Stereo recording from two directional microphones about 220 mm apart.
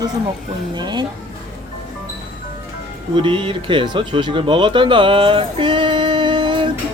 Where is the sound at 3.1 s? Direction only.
25° right (ahead or behind).